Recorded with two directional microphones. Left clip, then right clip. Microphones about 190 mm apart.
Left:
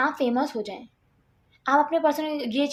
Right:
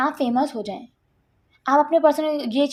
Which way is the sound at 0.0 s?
25° right (ahead or behind).